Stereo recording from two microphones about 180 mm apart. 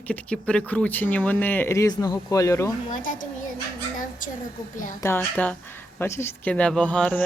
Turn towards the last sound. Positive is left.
turn(degrees=5)  # may be behind; listen again after turning